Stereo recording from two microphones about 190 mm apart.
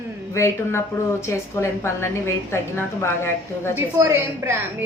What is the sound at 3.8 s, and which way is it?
Speech, 15° right (ahead or behind).